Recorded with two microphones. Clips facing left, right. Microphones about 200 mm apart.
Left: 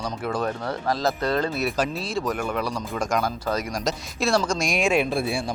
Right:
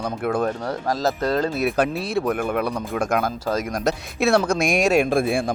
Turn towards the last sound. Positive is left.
turn(degrees=-50)  # may be behind; listen again after turning